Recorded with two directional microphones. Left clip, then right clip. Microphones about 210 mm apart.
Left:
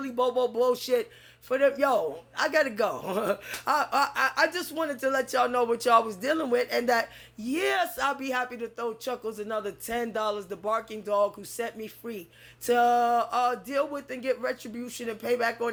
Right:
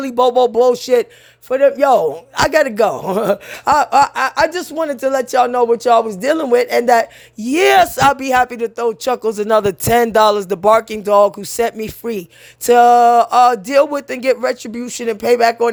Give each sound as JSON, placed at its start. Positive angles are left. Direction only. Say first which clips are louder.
{"t": 0.0, "sound": "a man's voice", "louder": "right 14 dB", "side_deg": -50}